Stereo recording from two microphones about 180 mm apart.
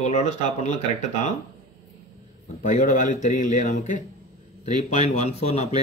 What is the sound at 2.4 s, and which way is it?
A man's voice, 45° left (ahead or behind).